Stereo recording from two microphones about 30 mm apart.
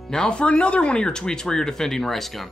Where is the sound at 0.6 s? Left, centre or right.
Left; by 2.5 s centre.